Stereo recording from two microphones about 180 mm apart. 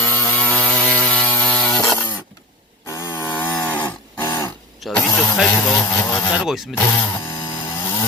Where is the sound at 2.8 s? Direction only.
15° left (ahead or behind).